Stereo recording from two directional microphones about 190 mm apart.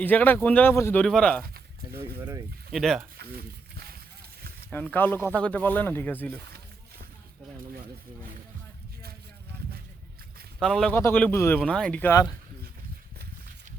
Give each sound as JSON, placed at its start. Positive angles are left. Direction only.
{"t": 0.0, "sound": "speech", "side_deg": 10}
{"t": 2.1, "sound": "speech", "side_deg": -10}
{"t": 3.2, "sound": "a sound", "side_deg": -55}
{"t": 4.9, "sound": "speech", "side_deg": 10}
{"t": 10.6, "sound": "a man's voice", "side_deg": 5}